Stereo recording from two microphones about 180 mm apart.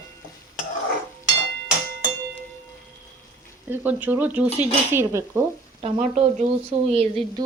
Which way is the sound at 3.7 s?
10° right (ahead or behind).